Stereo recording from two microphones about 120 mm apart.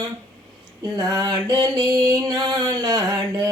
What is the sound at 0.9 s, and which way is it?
Music, 35° right (ahead or behind).